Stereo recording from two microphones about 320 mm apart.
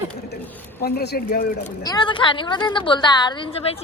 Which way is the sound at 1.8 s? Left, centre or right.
Centre.